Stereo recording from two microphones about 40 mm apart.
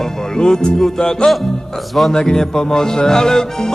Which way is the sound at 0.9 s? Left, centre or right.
Centre.